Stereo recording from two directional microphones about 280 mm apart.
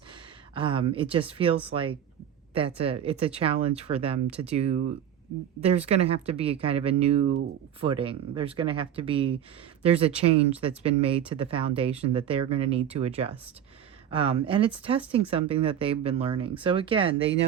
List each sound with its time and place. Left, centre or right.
0.5 s speech: centre